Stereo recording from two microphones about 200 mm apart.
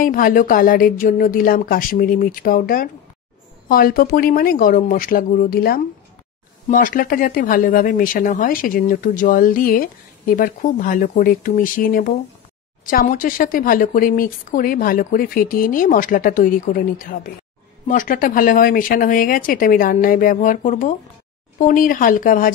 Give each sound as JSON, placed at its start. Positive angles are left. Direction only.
{"t": 0.0, "sound": "speech", "side_deg": 45}